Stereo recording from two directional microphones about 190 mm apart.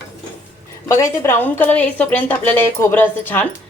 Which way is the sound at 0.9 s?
15° left (ahead or behind).